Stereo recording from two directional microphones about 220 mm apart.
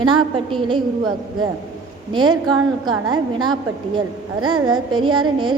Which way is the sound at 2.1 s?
20° right (ahead or behind).